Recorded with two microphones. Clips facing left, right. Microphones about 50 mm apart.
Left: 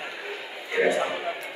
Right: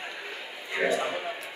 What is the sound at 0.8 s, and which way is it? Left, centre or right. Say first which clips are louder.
Speech: left 5 dB; centre.